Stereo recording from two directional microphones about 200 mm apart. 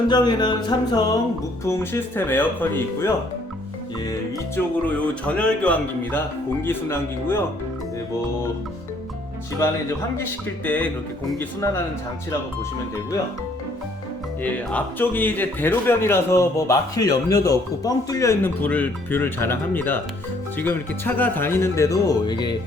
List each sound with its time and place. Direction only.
0.1 s a man's voice: 20° left (ahead or behind)
4.5 s a man's voice: 5° left (ahead or behind)
10.7 s a man's voice: 5° left (ahead or behind)
14.4 s a man's voice: 10° left (ahead or behind)